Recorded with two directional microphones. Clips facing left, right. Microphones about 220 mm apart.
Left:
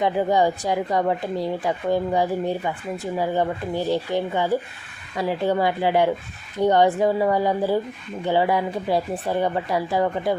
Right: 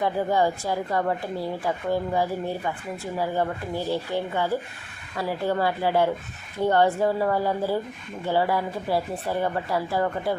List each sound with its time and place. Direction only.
0.0 s a woman's voice: 20° left (ahead or behind)